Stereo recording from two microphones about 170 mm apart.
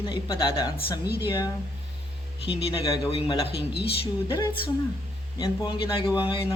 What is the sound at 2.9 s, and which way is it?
A man's voice, 20° left (ahead or behind).